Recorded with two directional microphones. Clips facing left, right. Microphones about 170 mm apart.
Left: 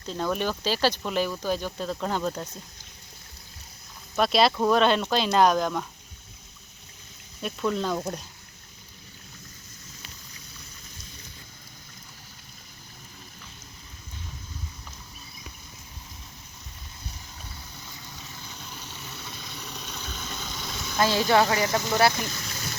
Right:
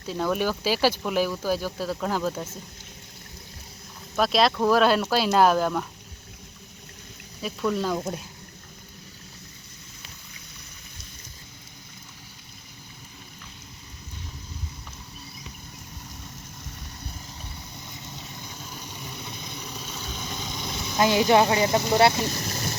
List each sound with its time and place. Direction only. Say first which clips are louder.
0.0 s speech: right 2 dB; 5° right (ahead or behind)
4.1 s speech: even; centre (ahead or behind)
7.4 s speech: right 1 dB; centre (ahead or behind)
17.8 s vehicle: right 3 dB; 20° right (ahead or behind)
22.3 s boat: right 6 dB; 40° right (ahead or behind)